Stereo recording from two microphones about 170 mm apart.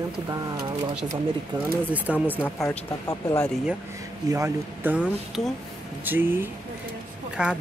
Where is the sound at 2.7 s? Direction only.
20° left (ahead or behind).